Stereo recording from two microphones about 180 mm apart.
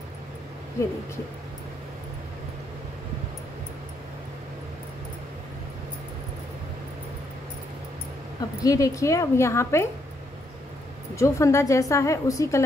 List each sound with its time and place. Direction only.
8.6 s a woman's voice: 20° left (ahead or behind)
11.1 s a woman's voice: 15° left (ahead or behind)